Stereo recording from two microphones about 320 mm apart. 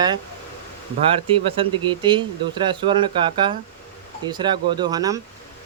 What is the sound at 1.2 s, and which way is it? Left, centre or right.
Speech, centre.